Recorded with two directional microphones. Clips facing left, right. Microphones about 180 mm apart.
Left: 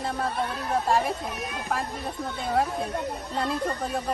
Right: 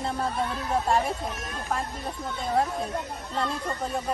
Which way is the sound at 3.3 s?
Centre (ahead or behind).